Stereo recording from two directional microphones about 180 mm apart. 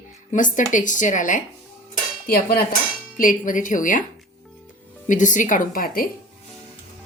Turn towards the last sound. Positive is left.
turn(degrees=50)  # may be behind; listen again after turning